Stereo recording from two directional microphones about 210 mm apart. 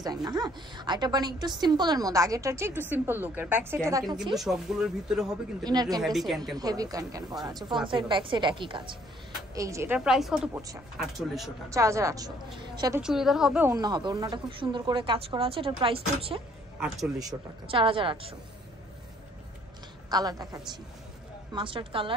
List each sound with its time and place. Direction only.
0.0 s a woman's voice: 20° right (ahead or behind)
4.2 s speech: centre (ahead or behind)
5.6 s speech: 20° right (ahead or behind)
6.0 s speech: centre (ahead or behind)
6.6 s a woman's voice: 15° right (ahead or behind); by 11.5 s centre (ahead or behind)
11.7 s a woman's voice: 15° right (ahead or behind)
13.0 s speech: centre (ahead or behind); by 18.3 s 25° right (ahead or behind)
20.1 s a woman's voice: 20° right (ahead or behind)